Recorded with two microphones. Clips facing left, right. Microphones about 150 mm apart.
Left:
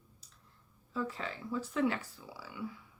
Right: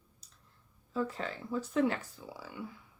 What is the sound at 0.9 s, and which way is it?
Speech, 45° right (ahead or behind).